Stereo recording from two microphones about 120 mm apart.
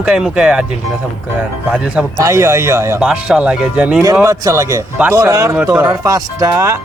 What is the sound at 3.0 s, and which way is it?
Speech, 5° right (ahead or behind).